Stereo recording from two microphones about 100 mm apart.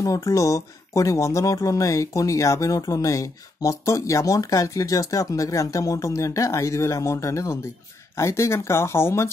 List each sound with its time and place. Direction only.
0.0 s speech: 35° left (ahead or behind)